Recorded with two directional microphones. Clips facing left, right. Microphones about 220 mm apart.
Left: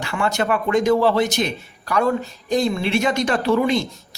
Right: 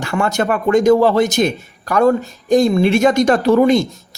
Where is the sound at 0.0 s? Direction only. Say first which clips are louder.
Right 4 dB; 45° right (ahead or behind).